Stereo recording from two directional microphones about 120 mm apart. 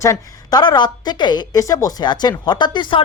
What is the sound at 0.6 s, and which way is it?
Speech, 35° left (ahead or behind).